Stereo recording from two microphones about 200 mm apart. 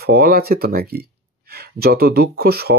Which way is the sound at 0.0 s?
50° right (ahead or behind).